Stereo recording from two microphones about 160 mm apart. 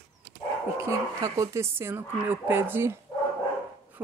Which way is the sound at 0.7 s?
20° right (ahead or behind).